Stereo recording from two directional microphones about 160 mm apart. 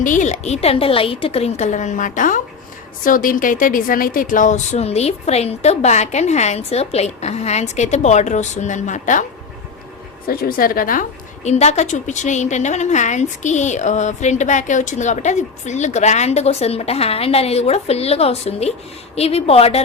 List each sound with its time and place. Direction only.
0.0 s a woman's voice: 50° left (ahead or behind)
10.2 s a woman's voice: 65° left (ahead or behind)
11.4 s a woman's voice: 45° left (ahead or behind)